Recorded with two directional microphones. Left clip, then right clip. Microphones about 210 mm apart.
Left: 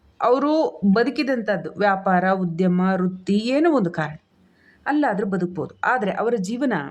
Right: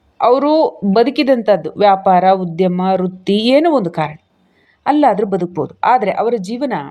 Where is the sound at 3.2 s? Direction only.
15° left (ahead or behind).